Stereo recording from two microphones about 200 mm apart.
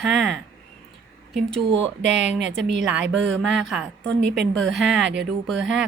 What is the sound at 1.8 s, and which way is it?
Speech, 65° right (ahead or behind).